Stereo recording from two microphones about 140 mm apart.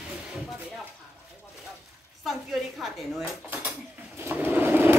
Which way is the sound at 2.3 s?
Centre (ahead or behind).